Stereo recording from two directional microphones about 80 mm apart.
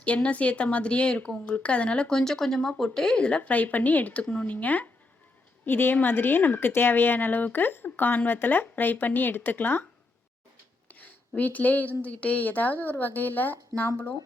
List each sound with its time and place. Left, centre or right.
0.0 s speech: centre
10.9 s speech: left